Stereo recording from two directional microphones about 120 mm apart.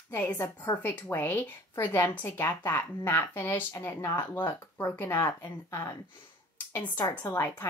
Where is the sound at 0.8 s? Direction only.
15° left (ahead or behind).